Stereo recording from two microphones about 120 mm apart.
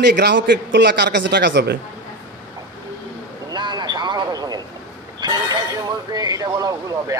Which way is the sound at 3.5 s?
35° right (ahead or behind).